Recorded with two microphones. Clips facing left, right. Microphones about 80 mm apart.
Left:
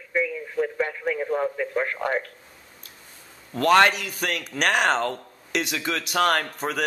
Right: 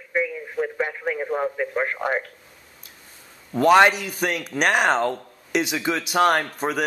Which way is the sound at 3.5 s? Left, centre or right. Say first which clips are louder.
Right 3 dB; centre.